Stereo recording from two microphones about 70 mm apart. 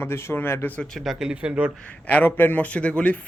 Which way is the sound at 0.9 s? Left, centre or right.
Centre.